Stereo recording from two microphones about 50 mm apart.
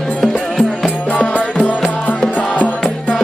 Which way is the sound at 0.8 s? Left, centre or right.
Left.